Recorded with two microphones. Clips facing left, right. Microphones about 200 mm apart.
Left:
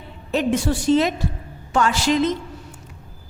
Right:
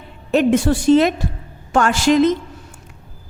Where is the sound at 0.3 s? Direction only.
55° right (ahead or behind).